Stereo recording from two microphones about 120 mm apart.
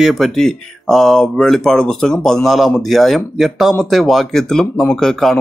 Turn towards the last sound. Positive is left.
turn(degrees=5)  # may be behind; listen again after turning